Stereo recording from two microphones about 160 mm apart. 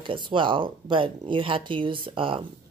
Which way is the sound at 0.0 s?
30° right (ahead or behind).